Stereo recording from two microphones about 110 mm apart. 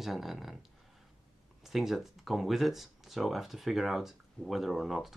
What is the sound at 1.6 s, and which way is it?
Speech, centre (ahead or behind).